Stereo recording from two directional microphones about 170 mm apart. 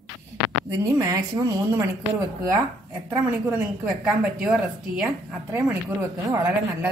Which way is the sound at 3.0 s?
10° right (ahead or behind).